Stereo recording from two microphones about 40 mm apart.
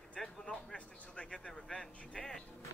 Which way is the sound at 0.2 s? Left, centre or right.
Centre.